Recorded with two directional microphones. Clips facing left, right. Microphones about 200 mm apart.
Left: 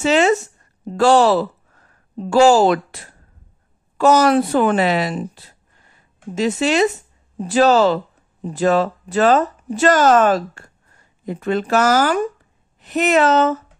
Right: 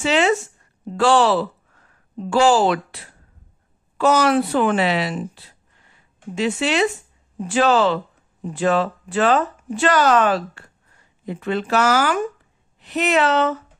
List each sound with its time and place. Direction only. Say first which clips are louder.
0.0 s speech: left 3 dB; 40° left (ahead or behind)